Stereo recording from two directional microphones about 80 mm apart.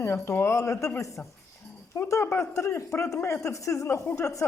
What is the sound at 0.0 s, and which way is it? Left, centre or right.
A man's voice, left.